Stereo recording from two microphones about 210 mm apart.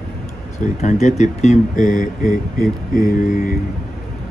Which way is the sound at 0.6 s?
35° left (ahead or behind).